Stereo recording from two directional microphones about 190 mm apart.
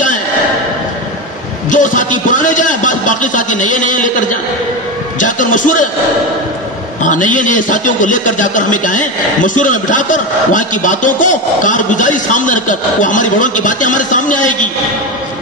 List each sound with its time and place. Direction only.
1.7 s a man's voice: 40° left (ahead or behind)
5.2 s a sound: 45° left (ahead or behind)
7.0 s a man's voice: 40° left (ahead or behind)